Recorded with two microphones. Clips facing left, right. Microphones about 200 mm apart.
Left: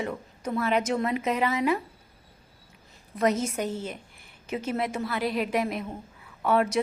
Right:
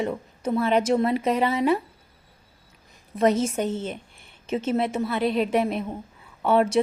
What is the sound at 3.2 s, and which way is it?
A woman's voice, 25° right (ahead or behind).